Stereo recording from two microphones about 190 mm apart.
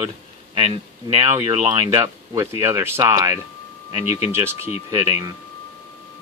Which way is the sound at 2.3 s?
15° right (ahead or behind).